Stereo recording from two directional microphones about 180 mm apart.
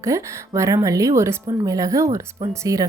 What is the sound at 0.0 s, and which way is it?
Speech, 15° right (ahead or behind).